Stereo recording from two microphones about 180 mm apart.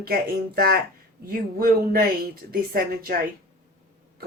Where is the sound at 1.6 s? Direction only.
55° right (ahead or behind).